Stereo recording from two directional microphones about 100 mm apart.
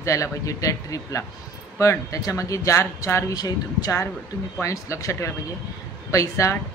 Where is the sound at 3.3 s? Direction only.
40° left (ahead or behind).